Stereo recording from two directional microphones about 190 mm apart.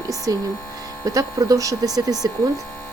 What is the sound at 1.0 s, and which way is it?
Speech, 15° right (ahead or behind).